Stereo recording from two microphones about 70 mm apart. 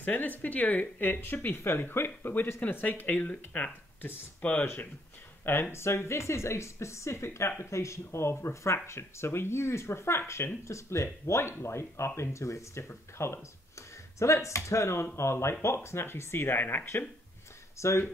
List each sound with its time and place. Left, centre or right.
0.0 s speech: left
5.4 s speech: left
17.7 s speech: left